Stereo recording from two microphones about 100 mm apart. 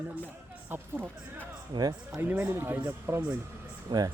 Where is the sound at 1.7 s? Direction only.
40° right (ahead or behind).